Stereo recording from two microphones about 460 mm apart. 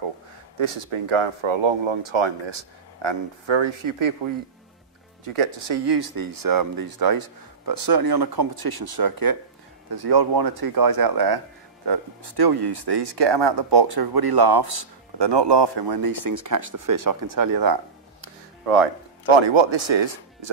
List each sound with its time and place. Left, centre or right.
0.6 s speech: right
5.9 s speech: right
19.3 s speech: right